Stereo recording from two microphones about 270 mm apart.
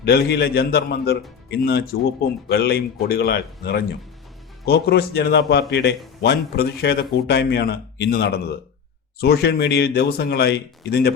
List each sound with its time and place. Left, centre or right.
0.0 s a man's voice: left